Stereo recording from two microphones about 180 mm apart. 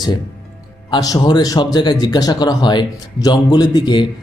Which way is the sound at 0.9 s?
20° left (ahead or behind).